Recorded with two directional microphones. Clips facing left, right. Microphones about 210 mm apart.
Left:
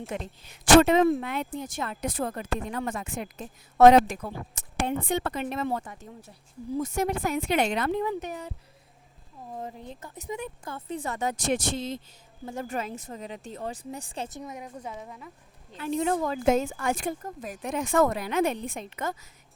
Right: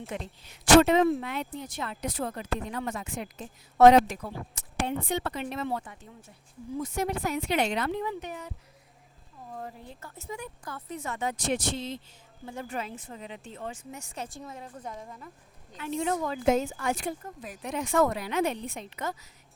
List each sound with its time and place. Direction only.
0.1 s a woman's voice: 45° left (ahead or behind)
9.6 s speech: 20° left (ahead or behind); by 15.3 s 5° left (ahead or behind)
15.7 s a woman's voice: 40° left (ahead or behind)